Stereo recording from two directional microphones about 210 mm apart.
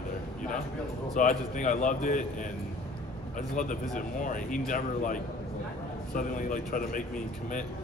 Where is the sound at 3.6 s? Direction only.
40° left (ahead or behind).